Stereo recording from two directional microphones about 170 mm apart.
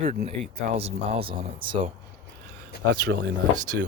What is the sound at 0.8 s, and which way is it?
Speech, 35° right (ahead or behind).